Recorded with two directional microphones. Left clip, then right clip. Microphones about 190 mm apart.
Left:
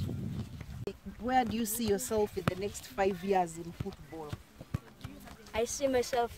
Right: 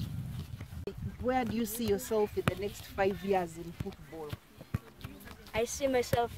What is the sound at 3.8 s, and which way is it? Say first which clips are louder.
Speech: left 1 dB; 50° right (ahead or behind).